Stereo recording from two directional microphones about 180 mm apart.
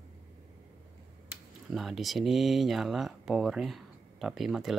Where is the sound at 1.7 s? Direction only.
Centre (ahead or behind).